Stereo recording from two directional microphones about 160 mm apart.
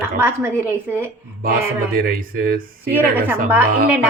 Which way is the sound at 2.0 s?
65° right (ahead or behind).